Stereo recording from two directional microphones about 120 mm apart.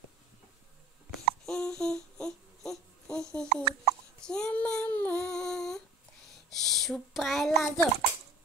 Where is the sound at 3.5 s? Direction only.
55° right (ahead or behind).